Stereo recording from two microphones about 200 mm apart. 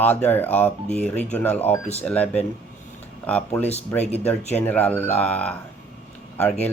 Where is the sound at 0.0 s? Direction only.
10° left (ahead or behind).